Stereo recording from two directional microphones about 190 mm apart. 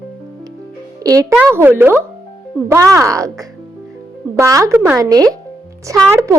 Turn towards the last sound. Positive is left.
turn(degrees=-15)  # may be behind; listen again after turning